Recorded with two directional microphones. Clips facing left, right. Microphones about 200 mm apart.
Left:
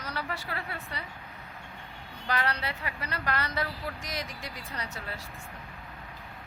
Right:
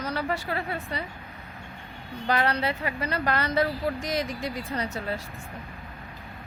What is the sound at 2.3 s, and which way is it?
A woman's voice, 25° right (ahead or behind).